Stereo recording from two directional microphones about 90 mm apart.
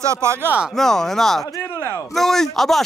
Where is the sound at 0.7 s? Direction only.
5° left (ahead or behind).